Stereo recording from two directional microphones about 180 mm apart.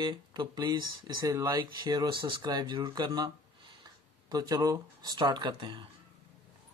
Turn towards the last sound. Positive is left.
turn(degrees=-25)  # may be behind; listen again after turning